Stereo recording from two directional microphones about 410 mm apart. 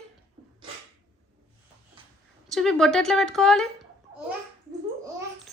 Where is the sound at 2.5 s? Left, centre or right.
Centre.